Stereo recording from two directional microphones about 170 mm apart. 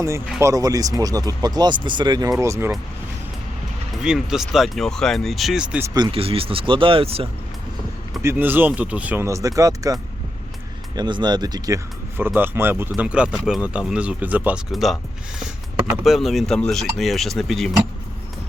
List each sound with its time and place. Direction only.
0.3 s speech: 20° right (ahead or behind)
3.9 s speech: 5° right (ahead or behind)
5.9 s speech: 30° right (ahead or behind)
8.2 s speech: 15° right (ahead or behind)
16.0 s speech: centre (ahead or behind)